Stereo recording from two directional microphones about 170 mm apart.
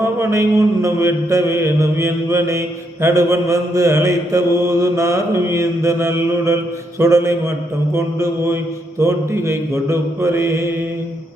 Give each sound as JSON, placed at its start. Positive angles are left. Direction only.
{"t": 0.0, "sound": "mantra", "side_deg": -15}